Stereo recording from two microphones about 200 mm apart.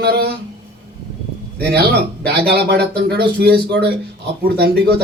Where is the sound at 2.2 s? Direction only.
55° right (ahead or behind).